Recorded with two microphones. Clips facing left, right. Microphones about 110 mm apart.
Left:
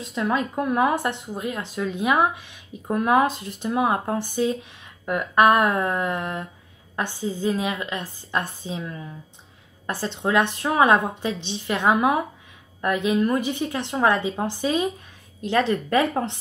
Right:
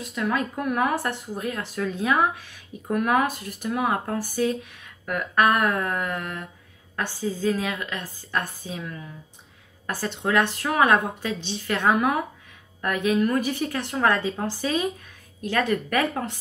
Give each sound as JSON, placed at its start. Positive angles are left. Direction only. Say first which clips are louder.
{"t": 0.0, "sound": "speech", "louder": "left 2 dB", "side_deg": 25}